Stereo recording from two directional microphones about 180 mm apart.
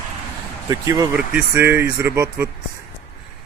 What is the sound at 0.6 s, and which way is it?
Speech, 20° right (ahead or behind).